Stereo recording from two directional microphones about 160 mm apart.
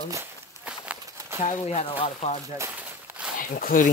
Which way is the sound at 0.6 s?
10° right (ahead or behind).